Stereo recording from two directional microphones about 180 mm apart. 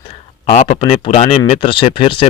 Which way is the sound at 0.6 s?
35° left (ahead or behind).